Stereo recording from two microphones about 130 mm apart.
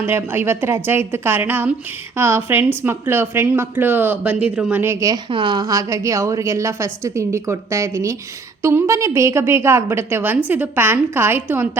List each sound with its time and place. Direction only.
0.0 s speech: 15° right (ahead or behind)
4.8 s a woman's voice: 20° right (ahead or behind)
5.3 s a woman's voice: 40° right (ahead or behind); by 11.8 s 15° right (ahead or behind)